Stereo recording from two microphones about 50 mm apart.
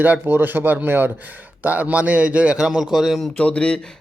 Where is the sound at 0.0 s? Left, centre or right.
Right.